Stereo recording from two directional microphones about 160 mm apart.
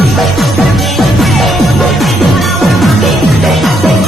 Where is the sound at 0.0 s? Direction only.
Centre (ahead or behind).